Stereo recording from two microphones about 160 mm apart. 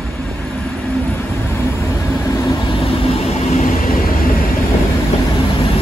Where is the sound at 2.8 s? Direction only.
40° left (ahead or behind); by 4.4 s 60° left (ahead or behind).